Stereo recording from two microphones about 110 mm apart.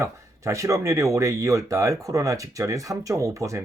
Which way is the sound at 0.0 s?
25° right (ahead or behind).